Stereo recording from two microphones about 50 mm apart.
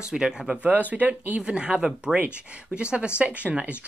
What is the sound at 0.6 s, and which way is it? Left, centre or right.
Speech, right.